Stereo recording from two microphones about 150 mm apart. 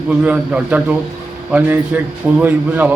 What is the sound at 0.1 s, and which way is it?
A man's voice, 10° right (ahead or behind).